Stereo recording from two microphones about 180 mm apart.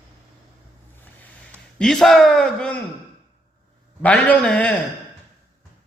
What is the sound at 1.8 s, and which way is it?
Speech, centre (ahead or behind).